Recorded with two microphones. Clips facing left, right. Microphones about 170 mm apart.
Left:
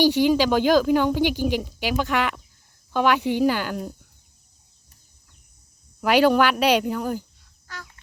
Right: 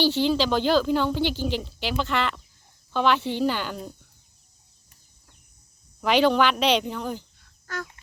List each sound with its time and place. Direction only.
0.0 s speech: 10° left (ahead or behind)
6.0 s speech: 10° left (ahead or behind)
7.7 s fowl: 50° right (ahead or behind)